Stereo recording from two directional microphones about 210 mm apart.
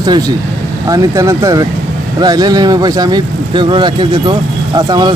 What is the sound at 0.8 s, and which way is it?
Speech, 15° right (ahead or behind).